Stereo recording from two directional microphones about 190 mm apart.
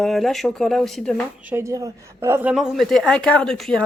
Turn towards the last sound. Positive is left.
turn(degrees=5)  # may be behind; listen again after turning